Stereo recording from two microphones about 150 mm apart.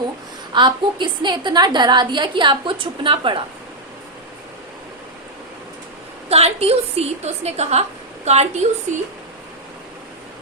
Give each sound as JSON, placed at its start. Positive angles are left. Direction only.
{"t": 0.5, "sound": "a woman's voice", "side_deg": -30}
{"t": 6.2, "sound": "a woman's voice", "side_deg": -45}